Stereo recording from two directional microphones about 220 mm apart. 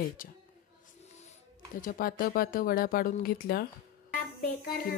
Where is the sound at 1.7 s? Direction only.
40° left (ahead or behind).